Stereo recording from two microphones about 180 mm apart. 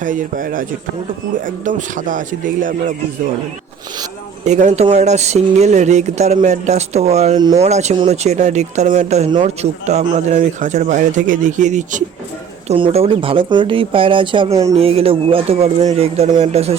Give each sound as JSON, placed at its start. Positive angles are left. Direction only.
{"t": 0.0, "sound": "a man's voice", "side_deg": -45}
{"t": 4.4, "sound": "speech", "side_deg": -40}
{"t": 7.3, "sound": "speech", "side_deg": -25}
{"t": 7.6, "sound": "a man's voice", "side_deg": -40}
{"t": 12.6, "sound": "speech", "side_deg": -30}